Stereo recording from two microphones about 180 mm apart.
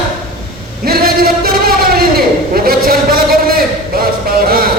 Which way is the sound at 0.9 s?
55° right (ahead or behind).